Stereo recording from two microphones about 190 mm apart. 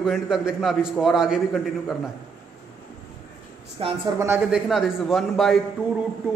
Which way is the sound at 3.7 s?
30° right (ahead or behind).